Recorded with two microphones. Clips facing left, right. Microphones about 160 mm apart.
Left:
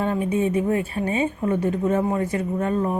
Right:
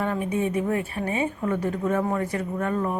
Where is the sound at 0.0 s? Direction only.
25° left (ahead or behind).